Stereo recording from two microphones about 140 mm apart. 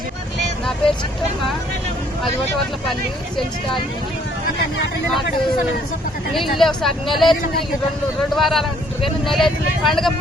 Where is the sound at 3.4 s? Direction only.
35° left (ahead or behind).